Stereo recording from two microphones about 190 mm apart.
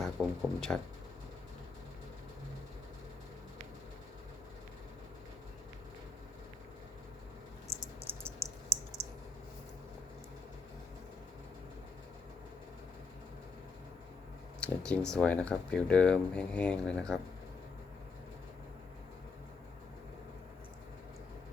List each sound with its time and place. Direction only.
0.0 s speech: centre (ahead or behind)
7.7 s mouse: 30° right (ahead or behind)
8.2 s a sound: 15° right (ahead or behind)
14.6 s speech: 5° left (ahead or behind)